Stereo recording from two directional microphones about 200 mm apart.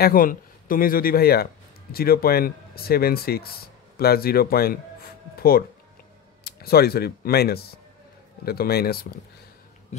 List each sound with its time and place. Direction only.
0.0 s speech: 45° left (ahead or behind)